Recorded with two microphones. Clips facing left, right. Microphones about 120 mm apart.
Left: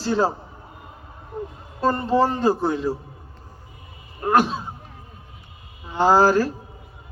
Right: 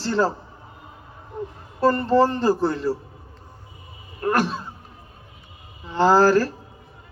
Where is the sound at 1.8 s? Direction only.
15° left (ahead or behind).